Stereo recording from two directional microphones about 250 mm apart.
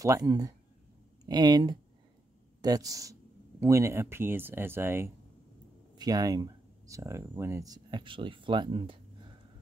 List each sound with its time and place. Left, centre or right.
0.0 s speech: centre